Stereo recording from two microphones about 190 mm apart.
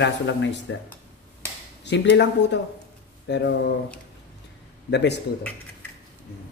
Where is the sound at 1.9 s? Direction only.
65° left (ahead or behind).